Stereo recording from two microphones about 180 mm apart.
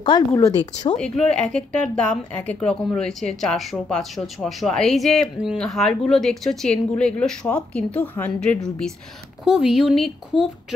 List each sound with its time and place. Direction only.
0.1 s speech: 25° left (ahead or behind)
0.9 s speech: 5° left (ahead or behind)
9.4 s speech: centre (ahead or behind)